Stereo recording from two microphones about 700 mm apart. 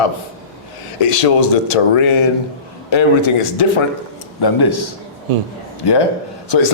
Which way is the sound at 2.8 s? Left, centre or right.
Left.